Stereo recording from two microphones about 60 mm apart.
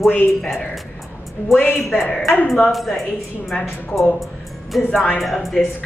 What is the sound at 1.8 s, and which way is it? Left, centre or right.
A woman's voice, centre.